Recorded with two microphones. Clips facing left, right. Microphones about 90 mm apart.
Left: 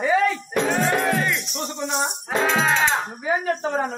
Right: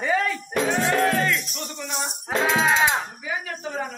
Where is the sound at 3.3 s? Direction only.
40° left (ahead or behind).